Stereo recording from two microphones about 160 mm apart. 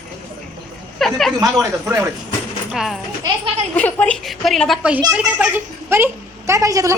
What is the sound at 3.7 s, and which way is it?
A woman's voice, 10° left (ahead or behind).